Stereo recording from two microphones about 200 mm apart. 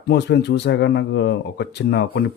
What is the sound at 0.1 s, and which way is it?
Speech, 60° left (ahead or behind).